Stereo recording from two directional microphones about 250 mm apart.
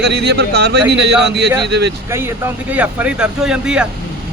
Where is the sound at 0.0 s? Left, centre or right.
Right.